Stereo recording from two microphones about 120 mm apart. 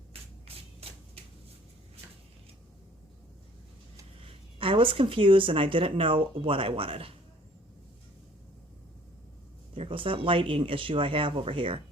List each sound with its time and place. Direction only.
0.1 s a sound: 55° right (ahead or behind)
4.3 s speech: 45° right (ahead or behind)
9.7 s speech: 50° right (ahead or behind)